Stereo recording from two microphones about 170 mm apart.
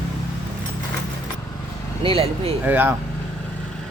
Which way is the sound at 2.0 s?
35° right (ahead or behind).